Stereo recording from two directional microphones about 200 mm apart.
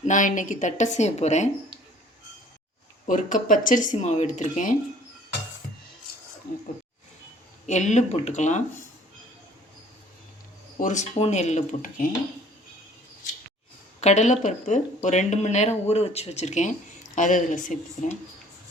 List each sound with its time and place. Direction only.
0.0 s speech: 40° left (ahead or behind)
3.1 s speech: 40° left (ahead or behind)
7.7 s speech: 35° left (ahead or behind)
10.8 s speech: 40° left (ahead or behind)
14.0 s speech: 35° left (ahead or behind)